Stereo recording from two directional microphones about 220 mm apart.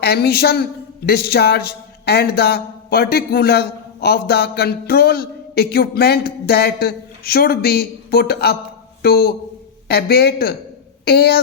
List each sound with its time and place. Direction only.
0.0 s a woman's voice: 45° left (ahead or behind)